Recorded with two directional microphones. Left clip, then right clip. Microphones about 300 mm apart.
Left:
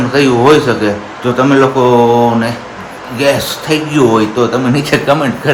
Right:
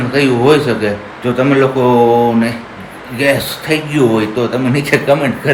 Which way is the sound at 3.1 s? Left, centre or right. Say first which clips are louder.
Left 2 dB; centre.